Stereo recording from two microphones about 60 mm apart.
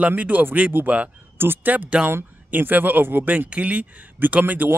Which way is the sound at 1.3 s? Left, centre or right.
Right.